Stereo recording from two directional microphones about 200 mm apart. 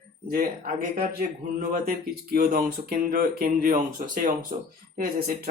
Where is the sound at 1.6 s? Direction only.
45° right (ahead or behind).